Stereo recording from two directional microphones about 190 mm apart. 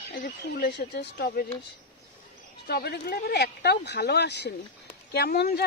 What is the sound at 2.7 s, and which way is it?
Speech, 55° left (ahead or behind).